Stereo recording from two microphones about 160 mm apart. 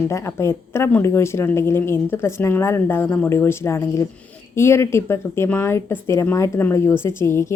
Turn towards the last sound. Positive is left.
turn(degrees=15)  # may be behind; listen again after turning